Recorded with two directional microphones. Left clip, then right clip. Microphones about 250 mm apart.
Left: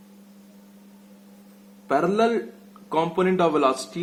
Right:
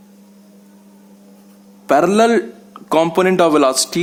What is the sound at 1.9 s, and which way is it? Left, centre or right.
Speech, right.